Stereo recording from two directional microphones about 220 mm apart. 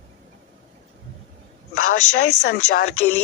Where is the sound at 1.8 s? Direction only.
75° left (ahead or behind).